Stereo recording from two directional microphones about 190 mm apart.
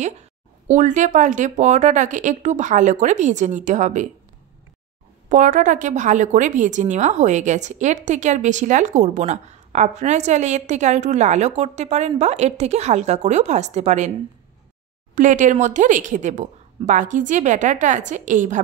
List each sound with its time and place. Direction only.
0.0 s a woman's voice: 40° right (ahead or behind)
5.3 s a woman's voice: 45° right (ahead or behind)
15.1 s a woman's voice: 40° right (ahead or behind)